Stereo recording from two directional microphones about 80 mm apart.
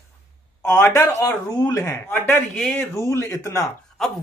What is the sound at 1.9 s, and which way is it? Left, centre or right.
Speech, left.